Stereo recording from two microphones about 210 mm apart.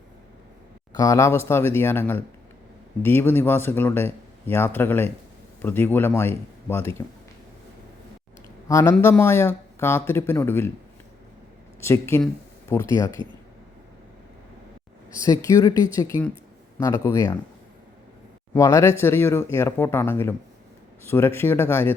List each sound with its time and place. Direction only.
0.9 s speech: 15° left (ahead or behind)
8.6 s speech: 15° left (ahead or behind)
11.8 s speech: 10° left (ahead or behind)
13.2 s speech: 20° right (ahead or behind)
15.1 s speech: 15° left (ahead or behind)
18.5 s speech: 15° left (ahead or behind)